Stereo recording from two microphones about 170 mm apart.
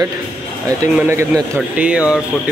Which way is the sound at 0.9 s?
15° right (ahead or behind).